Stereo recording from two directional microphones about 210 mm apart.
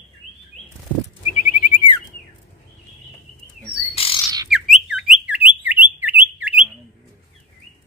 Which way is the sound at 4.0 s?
25° left (ahead or behind).